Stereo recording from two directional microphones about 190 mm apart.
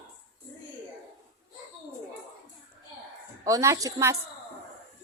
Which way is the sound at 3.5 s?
15° right (ahead or behind).